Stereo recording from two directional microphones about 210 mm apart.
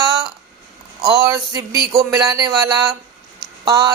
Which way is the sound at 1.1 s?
15° right (ahead or behind).